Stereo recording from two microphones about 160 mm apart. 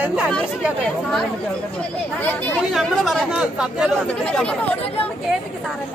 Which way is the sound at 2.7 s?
Centre (ahead or behind).